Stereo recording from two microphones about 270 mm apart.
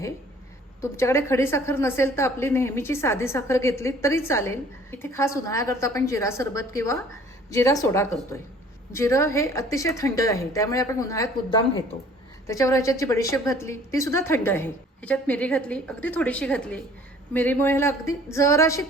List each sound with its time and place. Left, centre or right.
0.8 s a woman's voice: centre